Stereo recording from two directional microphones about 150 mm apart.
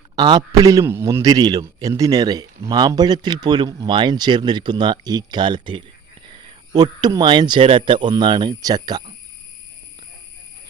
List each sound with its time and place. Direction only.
0.2 s a man's voice: 25° right (ahead or behind)